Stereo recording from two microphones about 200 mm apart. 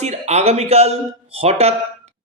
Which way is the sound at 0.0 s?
35° right (ahead or behind).